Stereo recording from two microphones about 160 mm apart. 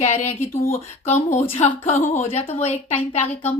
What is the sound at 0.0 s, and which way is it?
Speech, 45° left (ahead or behind).